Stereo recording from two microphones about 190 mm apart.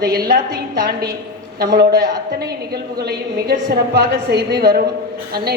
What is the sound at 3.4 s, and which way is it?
A woman's voice, 60° right (ahead or behind).